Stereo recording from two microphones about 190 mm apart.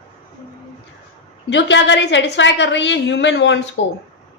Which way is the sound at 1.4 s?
70° left (ahead or behind).